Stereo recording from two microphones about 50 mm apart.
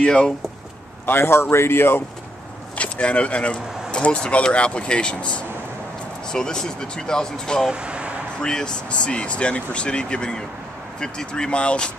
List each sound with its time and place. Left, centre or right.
0.0 s speech: centre
1.0 s a man's voice: left
2.7 s speech: left
7.7 s speech: right
8.4 s speech: centre